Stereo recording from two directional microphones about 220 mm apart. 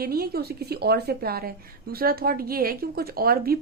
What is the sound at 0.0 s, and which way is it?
A woman's voice, 45° right (ahead or behind).